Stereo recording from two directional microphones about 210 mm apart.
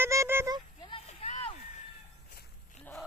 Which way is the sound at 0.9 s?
30° left (ahead or behind).